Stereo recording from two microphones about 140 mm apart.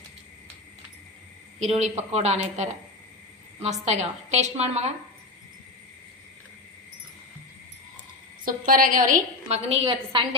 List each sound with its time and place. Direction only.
1.5 s a woman's voice: 55° right (ahead or behind)
8.4 s a woman's voice: 80° right
9.5 s a woman's voice: 50° right (ahead or behind)
9.8 s a woman's voice: 35° right (ahead or behind)